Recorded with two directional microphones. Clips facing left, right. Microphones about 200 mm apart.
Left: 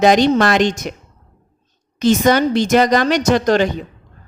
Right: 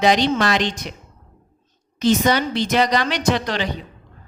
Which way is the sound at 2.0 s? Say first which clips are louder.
Left 4 dB; 50° left (ahead or behind).